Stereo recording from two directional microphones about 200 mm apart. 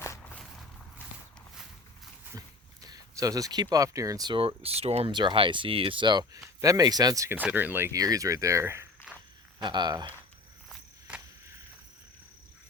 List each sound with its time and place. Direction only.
0.0 s walk: 15° left (ahead or behind)
0.3 s walk: centre (ahead or behind)
2.8 s speech: 15° right (ahead or behind)